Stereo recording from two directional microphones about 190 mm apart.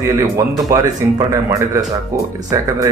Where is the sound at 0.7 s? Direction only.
20° right (ahead or behind).